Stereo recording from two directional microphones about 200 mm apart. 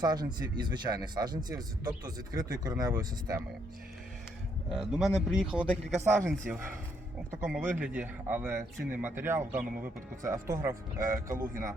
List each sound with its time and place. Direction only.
0.0 s a man's voice: 20° right (ahead or behind)
4.7 s speech: 5° right (ahead or behind)